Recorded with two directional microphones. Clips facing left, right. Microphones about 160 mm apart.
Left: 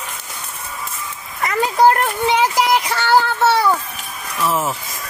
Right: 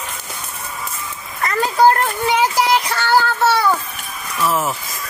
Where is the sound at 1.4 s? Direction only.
15° left (ahead or behind).